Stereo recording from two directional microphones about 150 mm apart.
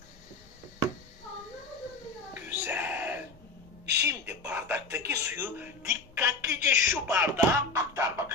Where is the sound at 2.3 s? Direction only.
10° right (ahead or behind).